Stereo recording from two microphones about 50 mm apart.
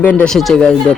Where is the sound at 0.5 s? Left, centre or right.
Left.